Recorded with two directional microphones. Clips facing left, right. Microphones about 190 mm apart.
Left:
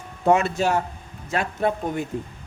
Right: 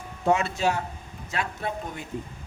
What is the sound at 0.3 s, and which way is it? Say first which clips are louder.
Speech: left 4 dB; 55° left (ahead or behind).